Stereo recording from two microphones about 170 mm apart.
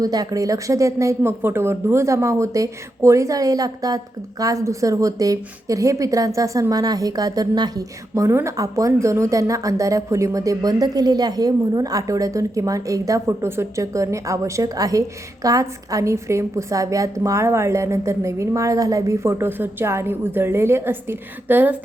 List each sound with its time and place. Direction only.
0.0 s a woman's voice: 20° right (ahead or behind)